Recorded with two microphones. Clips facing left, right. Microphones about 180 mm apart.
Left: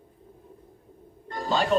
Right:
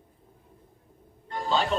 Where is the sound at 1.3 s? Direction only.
40° left (ahead or behind).